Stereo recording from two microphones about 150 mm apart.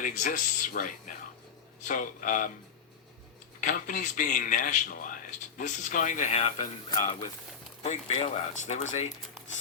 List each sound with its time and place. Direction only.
0.0 s speech: 60° left (ahead or behind)
3.6 s speech: 60° left (ahead or behind)